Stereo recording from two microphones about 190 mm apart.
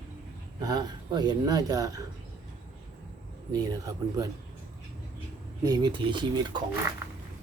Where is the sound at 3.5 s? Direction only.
20° right (ahead or behind).